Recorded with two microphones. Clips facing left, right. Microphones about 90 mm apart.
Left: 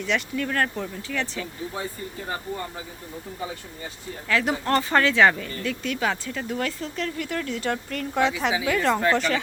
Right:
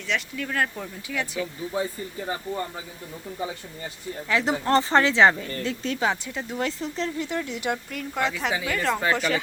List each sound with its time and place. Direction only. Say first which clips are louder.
0.0 s speech: left 3 dB; centre (ahead or behind)
4.3 s speech: right 1 dB; 20° right (ahead or behind); by 9.4 s 5° right (ahead or behind)